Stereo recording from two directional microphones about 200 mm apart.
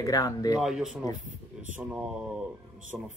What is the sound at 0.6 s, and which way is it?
Speech, centre (ahead or behind).